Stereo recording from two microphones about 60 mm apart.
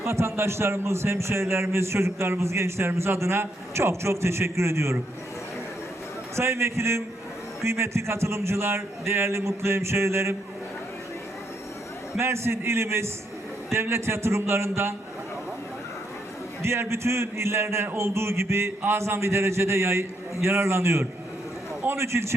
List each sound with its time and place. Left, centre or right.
0.0 s a man's voice: right
6.3 s a man's voice: right
12.1 s a man's voice: right
16.9 s a man's voice: right